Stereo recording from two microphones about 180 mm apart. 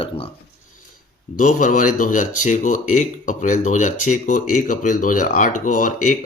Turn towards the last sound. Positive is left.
turn(degrees=45)  # may be behind; listen again after turning